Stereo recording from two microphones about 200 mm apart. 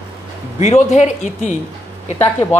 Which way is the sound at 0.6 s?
35° left (ahead or behind).